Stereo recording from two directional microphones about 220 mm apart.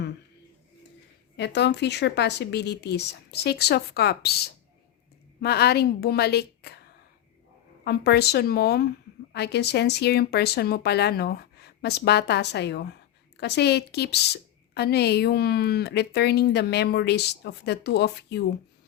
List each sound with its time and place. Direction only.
1.4 s a woman's voice: 50° left (ahead or behind)